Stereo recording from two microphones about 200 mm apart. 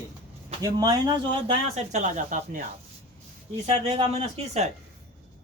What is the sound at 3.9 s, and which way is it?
Speech, 30° right (ahead or behind).